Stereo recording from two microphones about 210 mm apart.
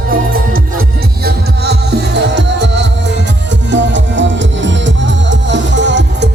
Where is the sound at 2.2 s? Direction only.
55° right (ahead or behind).